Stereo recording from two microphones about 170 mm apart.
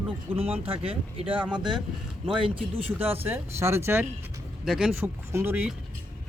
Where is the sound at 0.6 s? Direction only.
35° right (ahead or behind).